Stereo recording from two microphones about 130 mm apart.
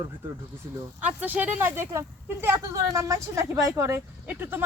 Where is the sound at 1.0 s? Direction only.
15° right (ahead or behind).